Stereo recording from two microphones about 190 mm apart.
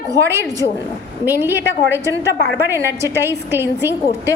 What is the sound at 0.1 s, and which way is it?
A woman's voice, 15° right (ahead or behind).